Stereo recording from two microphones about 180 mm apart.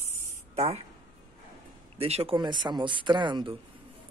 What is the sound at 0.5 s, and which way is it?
Speech, 35° right (ahead or behind).